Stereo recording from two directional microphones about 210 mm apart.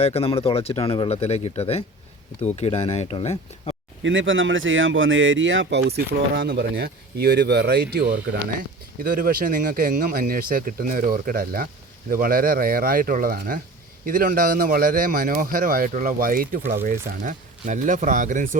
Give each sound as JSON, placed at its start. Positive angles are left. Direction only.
{"t": 0.0, "sound": "speech", "side_deg": 30}
{"t": 4.0, "sound": "speech", "side_deg": -65}
{"t": 6.1, "sound": "a man's voice", "side_deg": -50}